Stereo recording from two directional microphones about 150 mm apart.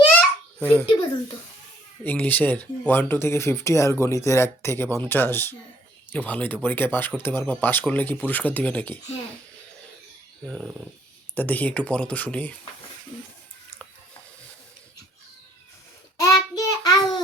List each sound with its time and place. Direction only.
0.2 s babbling: 10° left (ahead or behind)
2.0 s speech: 10° left (ahead or behind)
10.4 s speech: centre (ahead or behind)
16.1 s child singing: 20° left (ahead or behind)